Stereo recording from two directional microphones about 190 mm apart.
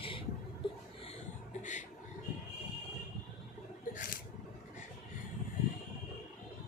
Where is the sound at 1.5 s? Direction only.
40° left (ahead or behind).